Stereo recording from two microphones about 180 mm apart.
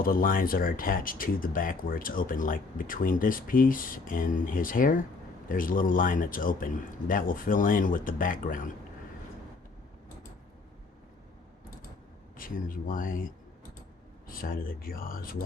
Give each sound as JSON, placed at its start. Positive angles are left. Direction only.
{"t": 0.0, "sound": "speech", "side_deg": 50}
{"t": 12.4, "sound": "speech", "side_deg": 50}